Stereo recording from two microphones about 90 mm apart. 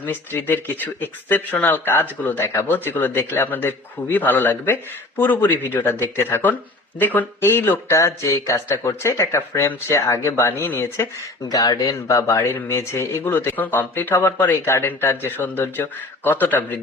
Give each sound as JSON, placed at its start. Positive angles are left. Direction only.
{"t": 0.0, "sound": "a man's voice", "side_deg": 25}
{"t": 7.9, "sound": "a man's voice", "side_deg": 35}
{"t": 11.4, "sound": "a man's voice", "side_deg": 45}